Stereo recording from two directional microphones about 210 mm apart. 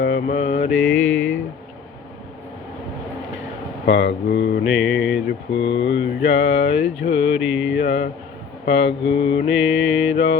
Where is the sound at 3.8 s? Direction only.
55° left (ahead or behind).